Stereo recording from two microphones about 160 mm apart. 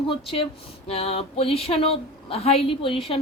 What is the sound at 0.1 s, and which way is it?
Speech, 35° left (ahead or behind).